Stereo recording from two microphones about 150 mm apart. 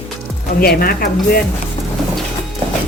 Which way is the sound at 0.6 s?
85° left.